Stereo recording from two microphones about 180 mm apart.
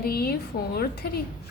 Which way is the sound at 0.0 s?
55° left (ahead or behind).